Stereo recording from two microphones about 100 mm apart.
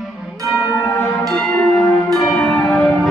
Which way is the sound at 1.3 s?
5° left (ahead or behind).